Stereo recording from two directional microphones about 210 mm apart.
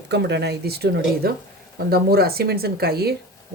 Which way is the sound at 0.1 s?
55° right (ahead or behind).